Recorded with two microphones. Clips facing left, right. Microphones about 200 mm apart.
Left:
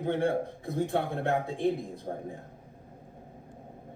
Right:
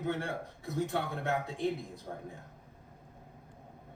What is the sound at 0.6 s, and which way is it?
A man's voice, 55° left (ahead or behind).